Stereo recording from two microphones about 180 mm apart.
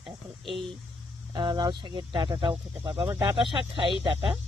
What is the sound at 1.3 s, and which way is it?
Speech, 25° right (ahead or behind).